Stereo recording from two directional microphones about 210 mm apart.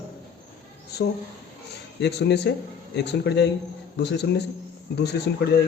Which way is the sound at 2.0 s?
55° left (ahead or behind).